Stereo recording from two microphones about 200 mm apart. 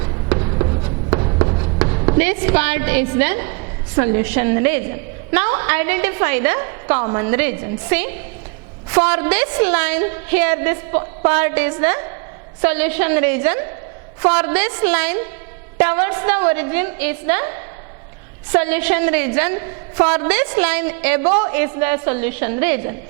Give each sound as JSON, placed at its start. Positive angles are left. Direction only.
{"t": 0.0, "sound": "a sound", "side_deg": -25}
{"t": 1.8, "sound": "chopping", "side_deg": -20}
{"t": 2.2, "sound": "a woman's voice", "side_deg": -10}